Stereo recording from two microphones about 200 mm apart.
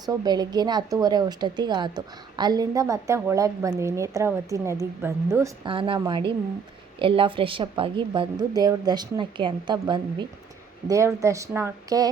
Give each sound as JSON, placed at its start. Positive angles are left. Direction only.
{"t": 0.0, "sound": "a woman's voice", "side_deg": -20}
{"t": 5.6, "sound": "a woman's voice", "side_deg": -25}